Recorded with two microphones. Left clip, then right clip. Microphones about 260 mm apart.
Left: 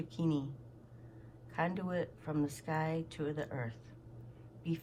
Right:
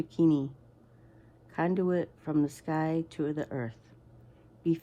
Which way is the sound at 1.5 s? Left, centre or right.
Right.